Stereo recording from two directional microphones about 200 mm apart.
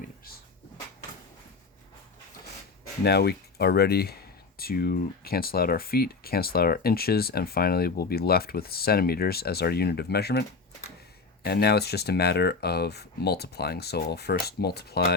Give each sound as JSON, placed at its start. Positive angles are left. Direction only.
{"t": 3.0, "sound": "speech", "side_deg": 55}
{"t": 11.4, "sound": "speech", "side_deg": 55}